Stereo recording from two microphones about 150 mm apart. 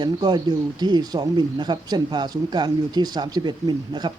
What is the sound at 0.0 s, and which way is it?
Speech, 30° right (ahead or behind).